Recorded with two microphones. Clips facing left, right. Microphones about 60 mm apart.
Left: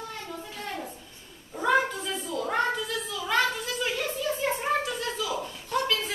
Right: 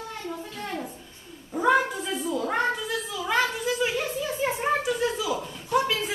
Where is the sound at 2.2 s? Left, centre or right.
Centre.